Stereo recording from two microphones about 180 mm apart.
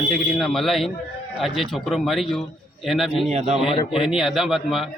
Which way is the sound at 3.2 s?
40° right (ahead or behind).